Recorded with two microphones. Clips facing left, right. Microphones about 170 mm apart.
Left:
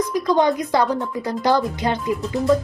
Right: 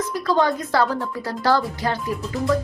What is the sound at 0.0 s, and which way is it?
Speech, 15° left (ahead or behind).